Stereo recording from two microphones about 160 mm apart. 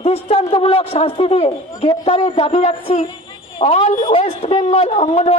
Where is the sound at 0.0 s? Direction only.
40° left (ahead or behind).